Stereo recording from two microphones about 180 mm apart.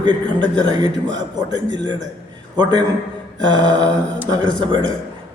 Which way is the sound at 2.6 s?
25° right (ahead or behind).